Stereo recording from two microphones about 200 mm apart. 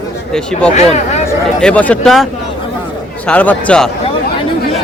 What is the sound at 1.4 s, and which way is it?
Speech, 5° left (ahead or behind).